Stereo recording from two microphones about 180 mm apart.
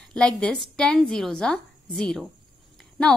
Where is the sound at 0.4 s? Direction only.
5° left (ahead or behind).